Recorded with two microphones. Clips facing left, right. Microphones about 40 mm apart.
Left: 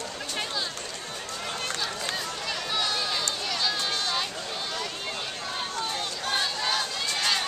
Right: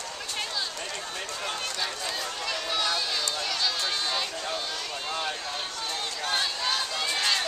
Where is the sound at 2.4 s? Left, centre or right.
Centre.